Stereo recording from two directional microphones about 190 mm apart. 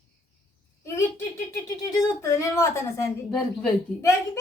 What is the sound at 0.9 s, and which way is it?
Speech, 15° left (ahead or behind).